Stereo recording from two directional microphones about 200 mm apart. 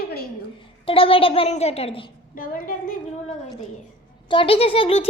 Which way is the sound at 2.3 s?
45° left (ahead or behind).